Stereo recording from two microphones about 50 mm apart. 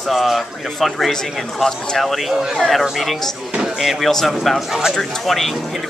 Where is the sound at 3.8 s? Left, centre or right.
Centre.